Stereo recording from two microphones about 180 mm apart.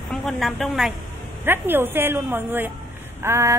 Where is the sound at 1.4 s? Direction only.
10° right (ahead or behind).